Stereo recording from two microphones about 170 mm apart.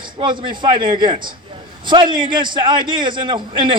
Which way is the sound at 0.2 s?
25° right (ahead or behind).